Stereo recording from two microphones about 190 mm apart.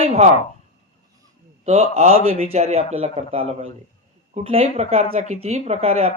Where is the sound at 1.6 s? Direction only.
35° right (ahead or behind).